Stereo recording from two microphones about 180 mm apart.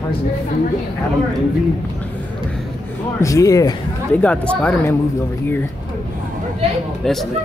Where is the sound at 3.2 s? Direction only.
15° left (ahead or behind).